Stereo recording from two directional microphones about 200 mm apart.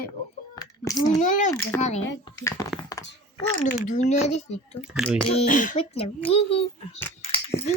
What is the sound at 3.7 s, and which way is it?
Speech, 35° left (ahead or behind).